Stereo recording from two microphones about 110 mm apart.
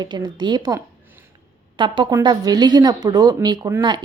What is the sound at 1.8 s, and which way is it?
A woman's voice, 45° right (ahead or behind).